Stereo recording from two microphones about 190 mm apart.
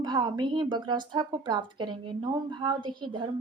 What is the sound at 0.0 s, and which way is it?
A woman's voice, 20° right (ahead or behind).